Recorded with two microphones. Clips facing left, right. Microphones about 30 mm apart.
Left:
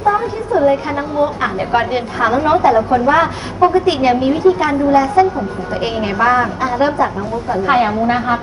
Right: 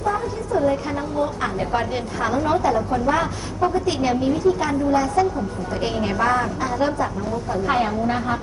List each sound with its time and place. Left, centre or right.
0.0 s a woman's voice: left